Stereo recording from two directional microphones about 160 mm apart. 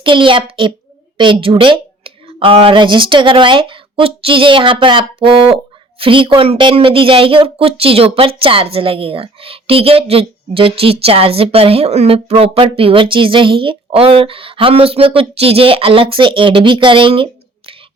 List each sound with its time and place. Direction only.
0.0 s speech: 30° right (ahead or behind)